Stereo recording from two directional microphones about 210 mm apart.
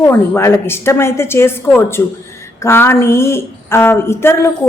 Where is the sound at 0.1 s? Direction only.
10° left (ahead or behind).